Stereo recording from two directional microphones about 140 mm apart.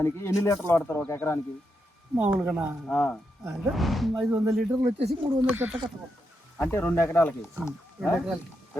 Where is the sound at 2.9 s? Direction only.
10° left (ahead or behind).